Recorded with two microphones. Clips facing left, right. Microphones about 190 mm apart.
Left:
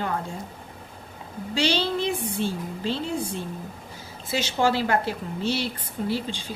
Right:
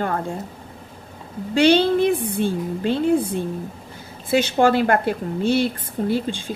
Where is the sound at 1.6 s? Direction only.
55° right (ahead or behind).